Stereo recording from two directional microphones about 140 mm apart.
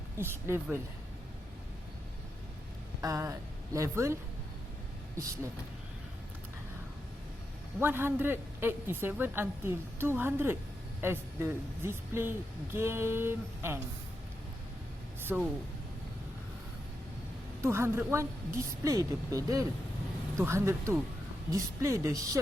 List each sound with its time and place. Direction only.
0.2 s speech: 15° right (ahead or behind)
3.0 s a woman's voice: 25° right (ahead or behind)
7.8 s speech: 15° right (ahead or behind)
15.3 s speech: 10° right (ahead or behind)
17.6 s a woman's voice: 20° right (ahead or behind)